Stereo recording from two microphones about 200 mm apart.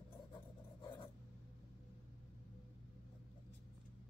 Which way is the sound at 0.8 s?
25° left (ahead or behind).